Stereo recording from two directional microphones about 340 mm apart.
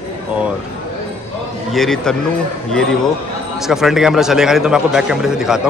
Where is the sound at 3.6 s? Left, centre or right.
Centre.